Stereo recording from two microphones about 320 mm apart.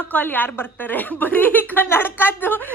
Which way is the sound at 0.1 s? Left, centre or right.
Centre.